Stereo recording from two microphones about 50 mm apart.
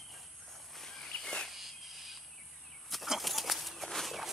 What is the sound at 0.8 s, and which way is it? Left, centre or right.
Walk, centre.